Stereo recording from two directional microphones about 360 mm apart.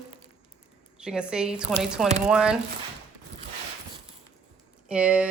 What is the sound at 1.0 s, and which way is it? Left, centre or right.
Speech, centre.